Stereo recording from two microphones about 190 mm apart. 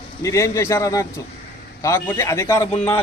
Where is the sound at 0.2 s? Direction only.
15° left (ahead or behind).